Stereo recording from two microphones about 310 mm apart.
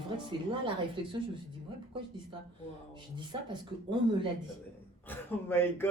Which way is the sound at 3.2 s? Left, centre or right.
Centre.